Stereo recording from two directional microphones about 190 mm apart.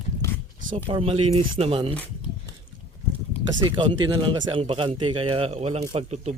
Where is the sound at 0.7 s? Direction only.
30° right (ahead or behind).